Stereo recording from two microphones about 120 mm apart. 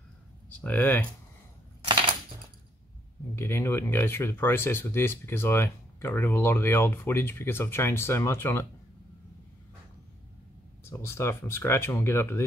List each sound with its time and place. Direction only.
0.5 s speech: 15° left (ahead or behind)
3.3 s speech: 20° left (ahead or behind)
10.8 s speech: 20° left (ahead or behind)